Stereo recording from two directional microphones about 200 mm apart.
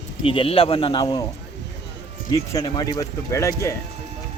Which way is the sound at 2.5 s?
20° left (ahead or behind).